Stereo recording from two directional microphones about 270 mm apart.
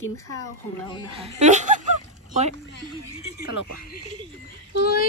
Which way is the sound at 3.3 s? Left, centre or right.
Left.